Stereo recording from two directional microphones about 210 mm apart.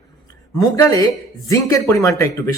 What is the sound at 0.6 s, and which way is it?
Speech, 15° left (ahead or behind).